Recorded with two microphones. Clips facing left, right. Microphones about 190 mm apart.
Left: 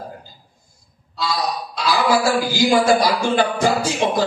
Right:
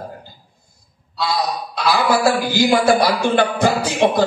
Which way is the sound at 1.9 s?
60° right (ahead or behind).